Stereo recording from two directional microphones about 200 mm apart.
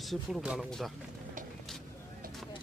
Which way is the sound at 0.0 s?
Centre (ahead or behind).